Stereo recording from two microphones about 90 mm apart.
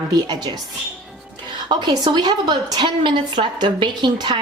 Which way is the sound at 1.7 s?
55° right (ahead or behind).